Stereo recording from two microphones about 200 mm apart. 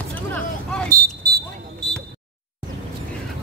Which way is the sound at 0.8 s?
50° right (ahead or behind).